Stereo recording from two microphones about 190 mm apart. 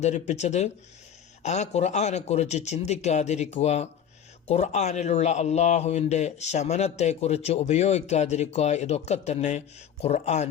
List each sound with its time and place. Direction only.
0.0 s speech: 35° left (ahead or behind)